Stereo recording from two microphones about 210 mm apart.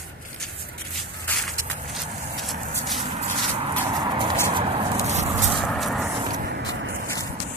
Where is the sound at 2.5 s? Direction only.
Centre (ahead or behind).